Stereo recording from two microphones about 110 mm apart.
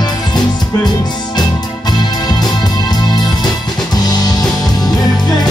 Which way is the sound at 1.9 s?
40° left (ahead or behind).